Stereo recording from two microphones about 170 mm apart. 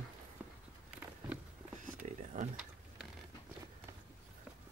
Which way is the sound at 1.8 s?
45° right (ahead or behind).